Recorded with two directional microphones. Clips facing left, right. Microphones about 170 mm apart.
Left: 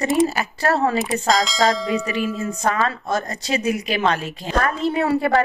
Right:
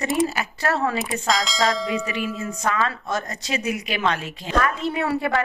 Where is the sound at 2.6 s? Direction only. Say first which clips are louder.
Left 2 dB; 35° left (ahead or behind).